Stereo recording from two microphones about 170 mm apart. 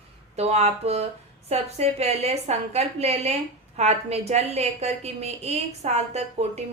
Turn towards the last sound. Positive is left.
turn(degrees=-40)  # may be behind; listen again after turning